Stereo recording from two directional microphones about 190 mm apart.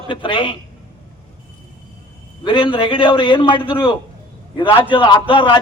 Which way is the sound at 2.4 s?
25° left (ahead or behind).